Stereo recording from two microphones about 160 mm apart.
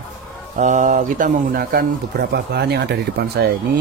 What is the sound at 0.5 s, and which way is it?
Speech, 50° right (ahead or behind).